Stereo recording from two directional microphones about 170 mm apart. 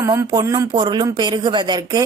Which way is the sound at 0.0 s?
20° right (ahead or behind).